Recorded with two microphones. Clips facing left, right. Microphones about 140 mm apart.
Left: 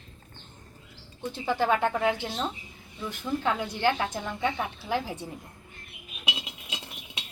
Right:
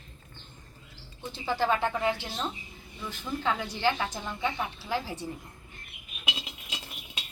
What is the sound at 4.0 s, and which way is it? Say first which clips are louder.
Speech: left 3 dB; 55° left (ahead or behind).